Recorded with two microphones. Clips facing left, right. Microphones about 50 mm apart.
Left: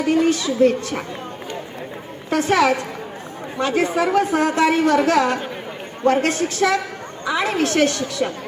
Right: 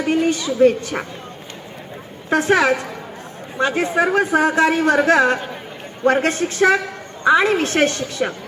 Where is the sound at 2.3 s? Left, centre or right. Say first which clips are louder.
Right 1 dB; centre.